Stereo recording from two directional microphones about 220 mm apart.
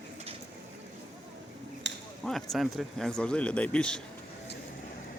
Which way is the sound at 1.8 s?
55° right (ahead or behind).